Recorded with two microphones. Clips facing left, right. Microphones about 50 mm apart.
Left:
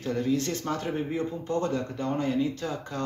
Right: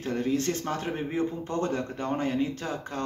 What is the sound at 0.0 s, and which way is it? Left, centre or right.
A man's voice, right.